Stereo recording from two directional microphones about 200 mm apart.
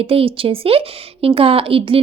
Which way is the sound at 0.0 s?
30° right (ahead or behind).